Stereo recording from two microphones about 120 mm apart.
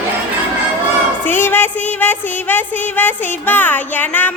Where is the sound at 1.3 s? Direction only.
15° left (ahead or behind).